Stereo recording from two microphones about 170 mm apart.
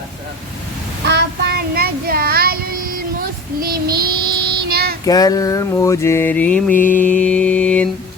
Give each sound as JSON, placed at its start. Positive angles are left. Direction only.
{"t": 1.0, "sound": "child singing", "side_deg": -75}
{"t": 5.0, "sound": "mantra", "side_deg": 20}